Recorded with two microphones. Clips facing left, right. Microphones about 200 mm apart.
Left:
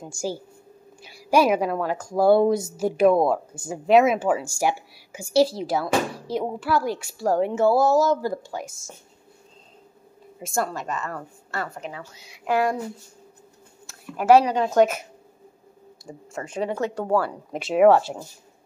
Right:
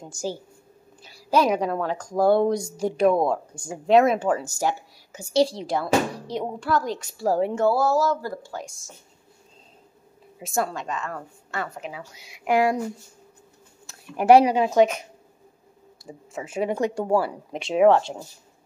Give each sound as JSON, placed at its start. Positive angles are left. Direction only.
{"t": 0.0, "sound": "a woman's voice", "side_deg": 10}
{"t": 7.6, "sound": "speech", "side_deg": 20}
{"t": 10.4, "sound": "a woman's voice", "side_deg": 0}
{"t": 12.4, "sound": "speech", "side_deg": -15}
{"t": 14.1, "sound": "speech", "side_deg": -15}
{"t": 16.1, "sound": "speech", "side_deg": -5}
{"t": 17.5, "sound": "a woman's voice", "side_deg": 0}